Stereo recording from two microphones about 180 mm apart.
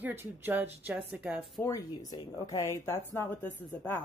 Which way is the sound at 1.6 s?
20° left (ahead or behind).